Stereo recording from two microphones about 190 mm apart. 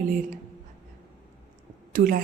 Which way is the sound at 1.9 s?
50° right (ahead or behind).